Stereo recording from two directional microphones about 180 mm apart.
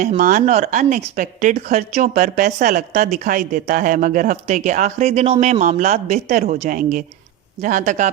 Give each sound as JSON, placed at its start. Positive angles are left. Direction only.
{"t": 0.2, "sound": "a woman's voice", "side_deg": -50}